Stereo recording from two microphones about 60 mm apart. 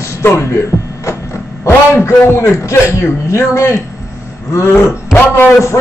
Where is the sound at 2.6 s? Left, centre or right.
Left.